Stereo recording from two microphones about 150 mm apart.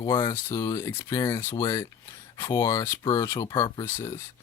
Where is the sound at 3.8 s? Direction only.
15° left (ahead or behind).